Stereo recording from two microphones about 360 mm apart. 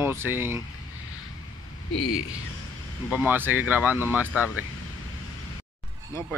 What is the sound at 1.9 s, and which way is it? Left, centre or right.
Speech, left.